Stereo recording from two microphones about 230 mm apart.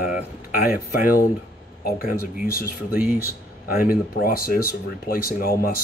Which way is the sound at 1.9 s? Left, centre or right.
Left.